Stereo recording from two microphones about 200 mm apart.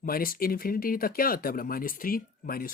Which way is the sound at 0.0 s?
45° left (ahead or behind).